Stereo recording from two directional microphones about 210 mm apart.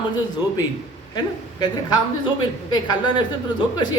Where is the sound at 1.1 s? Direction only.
20° left (ahead or behind).